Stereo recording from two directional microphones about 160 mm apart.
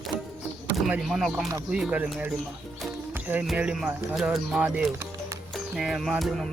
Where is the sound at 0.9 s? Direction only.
5° right (ahead or behind).